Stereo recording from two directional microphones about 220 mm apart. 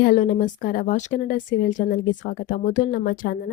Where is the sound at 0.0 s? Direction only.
40° left (ahead or behind).